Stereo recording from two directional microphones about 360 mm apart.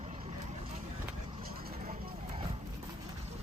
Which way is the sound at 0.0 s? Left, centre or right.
Centre.